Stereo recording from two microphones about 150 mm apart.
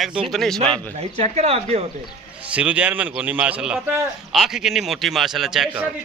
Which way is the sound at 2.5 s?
10° right (ahead or behind).